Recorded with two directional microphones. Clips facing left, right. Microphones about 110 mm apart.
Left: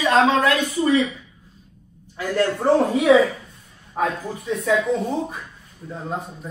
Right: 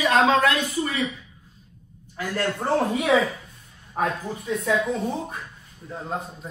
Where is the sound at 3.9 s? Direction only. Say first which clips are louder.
Left 2 dB; centre (ahead or behind).